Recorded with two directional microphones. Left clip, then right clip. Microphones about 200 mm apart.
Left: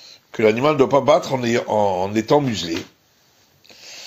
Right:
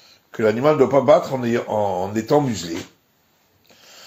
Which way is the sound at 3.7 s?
35° left (ahead or behind).